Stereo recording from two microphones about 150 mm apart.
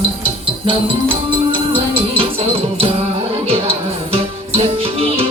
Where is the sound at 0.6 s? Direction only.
35° right (ahead or behind).